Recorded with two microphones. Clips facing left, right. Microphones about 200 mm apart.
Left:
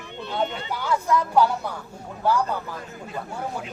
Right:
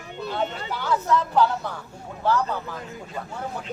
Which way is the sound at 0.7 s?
10° left (ahead or behind).